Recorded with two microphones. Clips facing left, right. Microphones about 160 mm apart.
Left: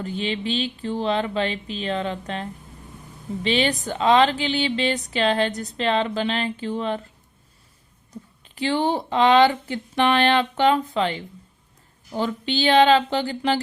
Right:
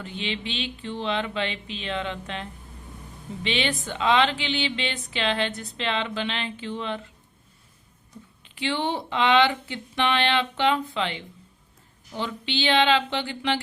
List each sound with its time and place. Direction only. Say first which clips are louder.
0.0 s speech: left 6 dB; 40° left (ahead or behind)
8.5 s speech: left 5 dB; 40° left (ahead or behind)